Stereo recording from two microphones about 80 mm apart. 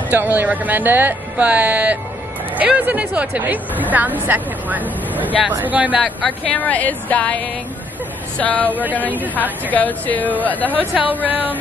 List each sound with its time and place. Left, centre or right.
0.1 s speech: right
6.0 s speech: centre
8.4 s speech: centre
10.7 s speech: right